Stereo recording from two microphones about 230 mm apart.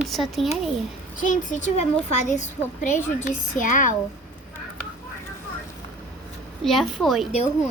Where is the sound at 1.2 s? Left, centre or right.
Left.